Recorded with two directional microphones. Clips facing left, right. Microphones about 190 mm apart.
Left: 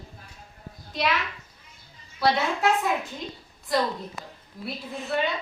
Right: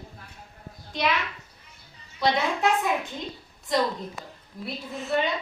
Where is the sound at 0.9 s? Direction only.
Centre (ahead or behind).